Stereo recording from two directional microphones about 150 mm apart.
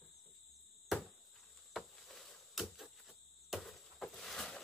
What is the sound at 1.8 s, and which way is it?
Insect, centre (ahead or behind).